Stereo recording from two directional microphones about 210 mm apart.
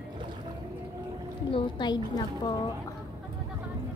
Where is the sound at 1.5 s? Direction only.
20° left (ahead or behind).